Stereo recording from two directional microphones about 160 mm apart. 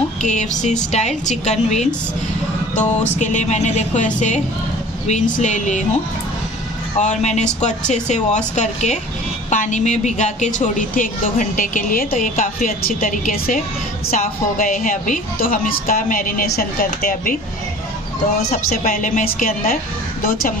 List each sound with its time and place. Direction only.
0.2 s speech: 50° left (ahead or behind)
3.2 s speech: 50° left (ahead or behind)
7.0 s a woman's voice: 45° left (ahead or behind)
18.5 s a woman's voice: 55° left (ahead or behind)